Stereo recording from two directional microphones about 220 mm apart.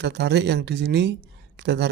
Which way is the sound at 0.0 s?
50° right (ahead or behind).